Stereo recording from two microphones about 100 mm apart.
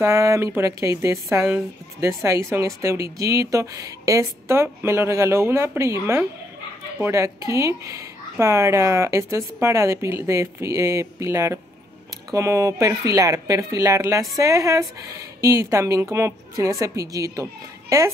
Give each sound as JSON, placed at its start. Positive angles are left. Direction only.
{"t": 0.0, "sound": "a woman's voice", "side_deg": -30}